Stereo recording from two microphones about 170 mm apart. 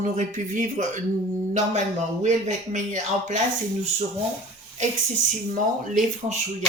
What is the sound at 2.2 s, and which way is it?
Speech, 45° right (ahead or behind).